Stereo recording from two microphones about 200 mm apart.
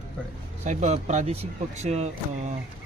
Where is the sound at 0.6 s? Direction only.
35° right (ahead or behind).